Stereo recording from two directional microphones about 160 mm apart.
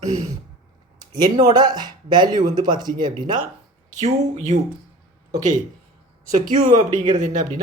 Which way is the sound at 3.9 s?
45° right (ahead or behind).